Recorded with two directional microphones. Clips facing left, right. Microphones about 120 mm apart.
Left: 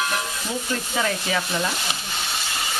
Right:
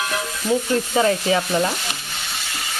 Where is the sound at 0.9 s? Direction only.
35° right (ahead or behind).